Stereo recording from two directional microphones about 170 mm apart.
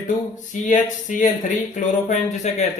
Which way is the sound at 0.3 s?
45° left (ahead or behind).